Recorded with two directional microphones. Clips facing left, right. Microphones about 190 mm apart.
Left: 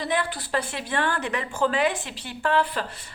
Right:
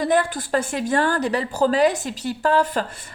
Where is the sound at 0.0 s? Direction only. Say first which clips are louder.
Right 7 dB; 45° right (ahead or behind).